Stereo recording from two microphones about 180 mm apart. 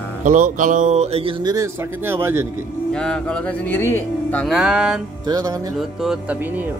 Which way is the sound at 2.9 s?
5° left (ahead or behind).